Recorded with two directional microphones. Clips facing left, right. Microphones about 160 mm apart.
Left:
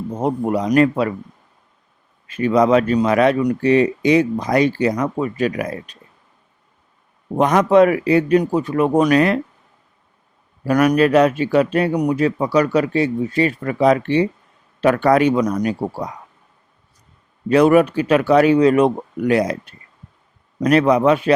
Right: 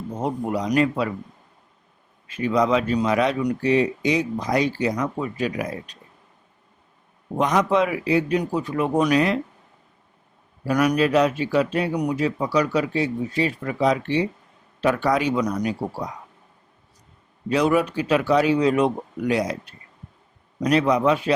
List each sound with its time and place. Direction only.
0.2 s speech: 50° left (ahead or behind)
2.3 s speech: 55° left (ahead or behind)
7.3 s speech: 55° left (ahead or behind)
10.7 s speech: 55° left (ahead or behind)
17.5 s speech: 60° left (ahead or behind)
20.6 s speech: 55° left (ahead or behind)